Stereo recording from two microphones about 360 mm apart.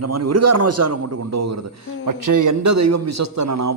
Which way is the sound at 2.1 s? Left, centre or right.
Right.